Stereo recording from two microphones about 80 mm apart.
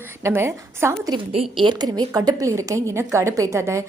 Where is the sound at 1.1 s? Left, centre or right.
Right.